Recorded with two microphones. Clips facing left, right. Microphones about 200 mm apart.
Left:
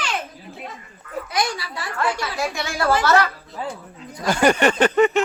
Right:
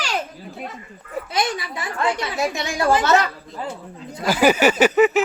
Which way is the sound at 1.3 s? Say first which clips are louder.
Right 1 dB; 20° right (ahead or behind).